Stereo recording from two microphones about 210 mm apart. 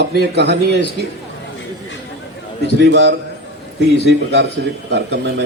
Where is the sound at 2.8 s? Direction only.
55° right (ahead or behind).